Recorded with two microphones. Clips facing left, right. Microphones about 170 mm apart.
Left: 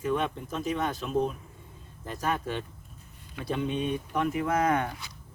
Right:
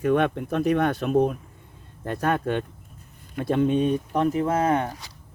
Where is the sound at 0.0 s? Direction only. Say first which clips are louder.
Right 7 dB; 60° right (ahead or behind); by 5.1 s 35° right (ahead or behind).